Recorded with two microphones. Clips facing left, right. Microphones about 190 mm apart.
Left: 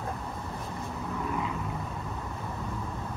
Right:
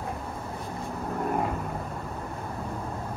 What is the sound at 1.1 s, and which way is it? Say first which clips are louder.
Vehicle: right 5 dB; 50° right (ahead or behind).